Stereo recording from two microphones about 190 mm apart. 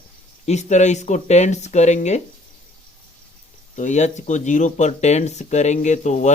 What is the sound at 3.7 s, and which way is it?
Speech, 40° left (ahead or behind).